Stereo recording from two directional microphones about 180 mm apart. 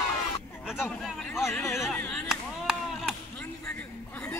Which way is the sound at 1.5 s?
15° left (ahead or behind).